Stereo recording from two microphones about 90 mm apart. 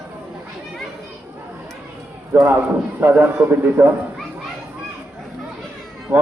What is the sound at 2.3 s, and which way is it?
A man's voice, 25° right (ahead or behind).